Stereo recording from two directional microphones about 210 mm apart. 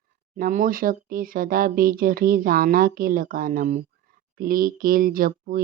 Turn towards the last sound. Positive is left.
turn(degrees=-40)  # may be behind; listen again after turning